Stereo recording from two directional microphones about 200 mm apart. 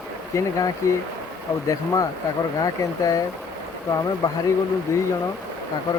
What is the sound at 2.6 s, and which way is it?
Speech, 15° left (ahead or behind).